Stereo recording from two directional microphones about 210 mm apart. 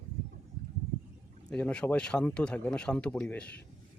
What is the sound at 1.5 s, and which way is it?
Speech, 5° left (ahead or behind).